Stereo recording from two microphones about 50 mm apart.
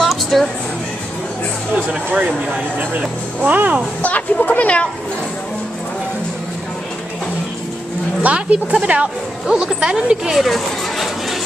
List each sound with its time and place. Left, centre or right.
0.0 s a sound: centre
1.9 s speech: right
3.3 s speech: right
4.0 s speech: left
8.2 s speech: right
9.5 s speech: centre
10.4 s a sound: centre